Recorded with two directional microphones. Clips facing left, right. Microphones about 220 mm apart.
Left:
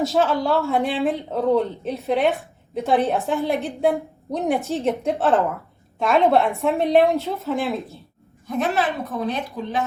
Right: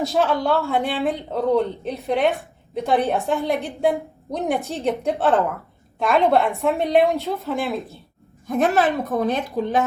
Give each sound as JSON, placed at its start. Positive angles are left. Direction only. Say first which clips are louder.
{"t": 0.0, "sound": "speech", "louder": "even", "side_deg": 0}
{"t": 8.4, "sound": "a woman's voice", "louder": "right 3 dB", "side_deg": -45}